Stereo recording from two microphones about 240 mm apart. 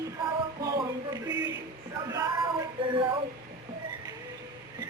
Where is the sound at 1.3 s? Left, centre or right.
Right.